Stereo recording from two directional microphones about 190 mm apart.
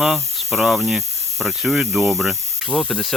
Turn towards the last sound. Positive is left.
turn(degrees=5)  # may be behind; listen again after turning